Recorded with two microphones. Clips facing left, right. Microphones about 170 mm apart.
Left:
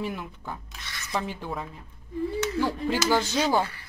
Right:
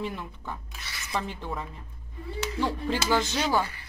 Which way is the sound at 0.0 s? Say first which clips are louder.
Left 1 dB; 5° left (ahead or behind).